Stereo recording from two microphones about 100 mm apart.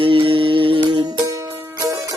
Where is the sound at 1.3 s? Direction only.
35° right (ahead or behind).